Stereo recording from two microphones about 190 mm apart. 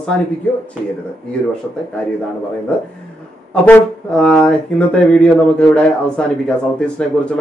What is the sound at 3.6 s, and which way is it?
Speech, 5° left (ahead or behind).